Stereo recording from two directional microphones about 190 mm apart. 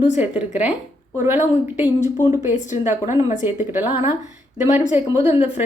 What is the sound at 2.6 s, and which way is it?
Speech, 40° left (ahead or behind).